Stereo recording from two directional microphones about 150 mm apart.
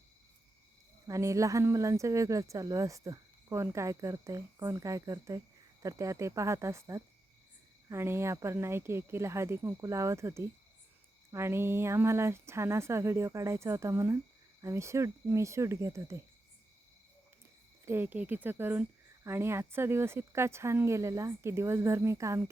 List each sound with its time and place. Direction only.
1.0 s speech: 20° right (ahead or behind)
17.8 s speech: 15° right (ahead or behind)